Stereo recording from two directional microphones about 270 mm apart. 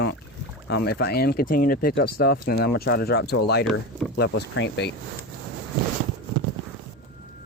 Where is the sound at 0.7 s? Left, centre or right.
Left.